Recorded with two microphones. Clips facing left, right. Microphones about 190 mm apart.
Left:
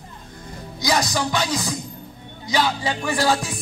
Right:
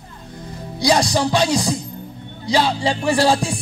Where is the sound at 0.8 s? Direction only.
30° right (ahead or behind).